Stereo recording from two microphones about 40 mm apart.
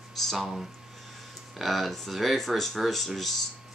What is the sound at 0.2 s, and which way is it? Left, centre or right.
Speech, centre.